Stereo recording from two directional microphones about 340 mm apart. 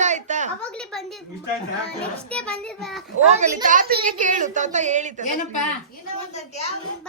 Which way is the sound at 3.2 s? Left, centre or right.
Right.